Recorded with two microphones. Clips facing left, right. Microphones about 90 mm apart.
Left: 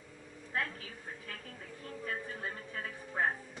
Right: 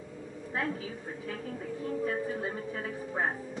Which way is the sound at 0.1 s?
20° right (ahead or behind).